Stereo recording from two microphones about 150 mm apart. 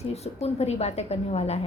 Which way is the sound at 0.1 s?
45° left (ahead or behind).